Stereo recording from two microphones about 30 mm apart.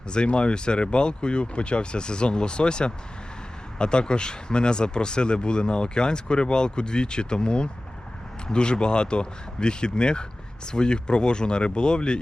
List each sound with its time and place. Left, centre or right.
0.1 s speech: left